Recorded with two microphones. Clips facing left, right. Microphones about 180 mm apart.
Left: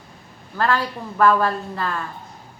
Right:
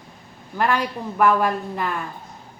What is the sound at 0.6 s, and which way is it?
A woman's voice, 15° right (ahead or behind).